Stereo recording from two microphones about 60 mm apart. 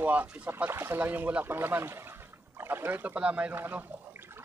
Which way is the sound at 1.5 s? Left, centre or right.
Right.